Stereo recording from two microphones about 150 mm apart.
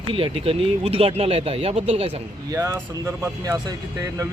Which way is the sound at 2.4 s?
20° right (ahead or behind).